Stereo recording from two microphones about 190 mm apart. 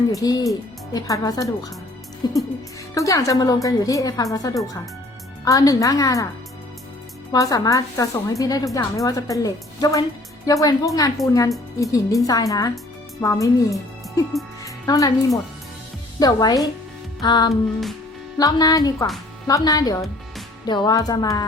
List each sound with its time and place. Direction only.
0.1 s a woman's voice: 20° left (ahead or behind)
7.3 s a woman's voice: 20° left (ahead or behind)
14.6 s music: 15° left (ahead or behind)
16.2 s speech: 20° left (ahead or behind)
17.5 s music: centre (ahead or behind)
18.3 s speech: 20° left (ahead or behind)